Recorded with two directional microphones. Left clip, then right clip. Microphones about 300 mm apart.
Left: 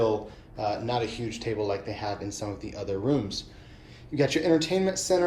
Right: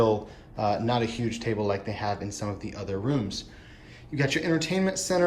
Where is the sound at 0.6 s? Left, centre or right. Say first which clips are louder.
Right 2 dB; centre.